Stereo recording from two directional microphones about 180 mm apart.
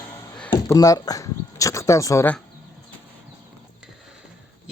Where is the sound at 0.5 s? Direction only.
20° left (ahead or behind).